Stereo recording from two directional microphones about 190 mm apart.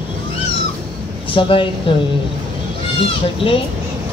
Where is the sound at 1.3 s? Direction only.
25° left (ahead or behind).